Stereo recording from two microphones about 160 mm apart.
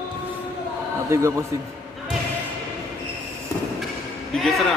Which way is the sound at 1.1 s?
15° right (ahead or behind).